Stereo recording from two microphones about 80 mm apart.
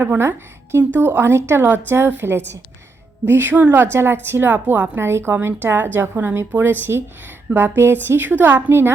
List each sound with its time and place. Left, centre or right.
0.0 s a woman's voice: right